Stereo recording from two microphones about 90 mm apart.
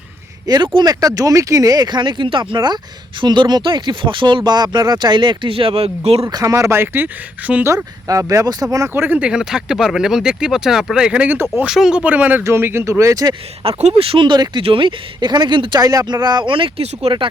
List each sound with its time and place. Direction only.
0.4 s speech: 45° right (ahead or behind); by 6.2 s 90° right
6.2 s speech: 35° right (ahead or behind); by 7.6 s 20° right (ahead or behind)
8.0 s speech: 35° right (ahead or behind)
8.9 s speech: 20° right (ahead or behind)
12.4 s speech: 30° right (ahead or behind)
13.7 s speech: 90° right; by 14.6 s 55° right (ahead or behind)
14.6 s speech: 80° right; by 15.8 s 65° right (ahead or behind)
15.8 s speech: 40° right (ahead or behind)
16.2 s speech: 55° right (ahead or behind); by 17.2 s 75° right (ahead or behind)